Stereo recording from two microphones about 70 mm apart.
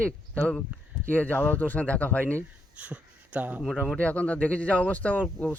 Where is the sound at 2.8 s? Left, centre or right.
Centre.